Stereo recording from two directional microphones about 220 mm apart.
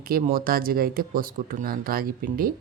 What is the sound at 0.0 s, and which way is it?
Speech, 40° right (ahead or behind).